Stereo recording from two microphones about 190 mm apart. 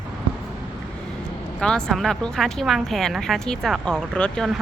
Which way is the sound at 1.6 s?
5° left (ahead or behind).